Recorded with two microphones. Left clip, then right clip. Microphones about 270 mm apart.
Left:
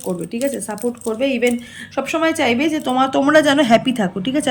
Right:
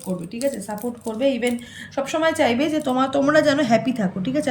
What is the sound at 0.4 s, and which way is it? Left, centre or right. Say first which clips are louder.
Speech: left 3 dB; centre.